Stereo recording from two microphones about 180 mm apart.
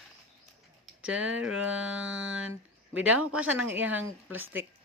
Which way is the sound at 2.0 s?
90° right.